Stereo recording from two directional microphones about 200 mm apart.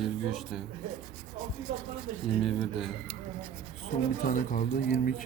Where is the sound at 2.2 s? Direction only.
Centre (ahead or behind).